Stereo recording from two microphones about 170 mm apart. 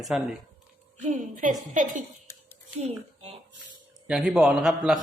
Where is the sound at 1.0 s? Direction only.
50° right (ahead or behind).